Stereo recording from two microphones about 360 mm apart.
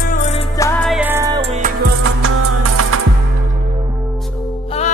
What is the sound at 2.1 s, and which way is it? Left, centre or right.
Music, right.